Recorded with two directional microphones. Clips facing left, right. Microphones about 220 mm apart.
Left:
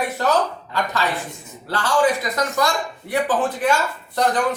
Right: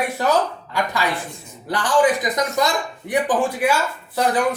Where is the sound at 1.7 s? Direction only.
15° right (ahead or behind).